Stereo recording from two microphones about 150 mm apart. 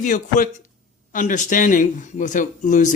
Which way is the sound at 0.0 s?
60° left (ahead or behind).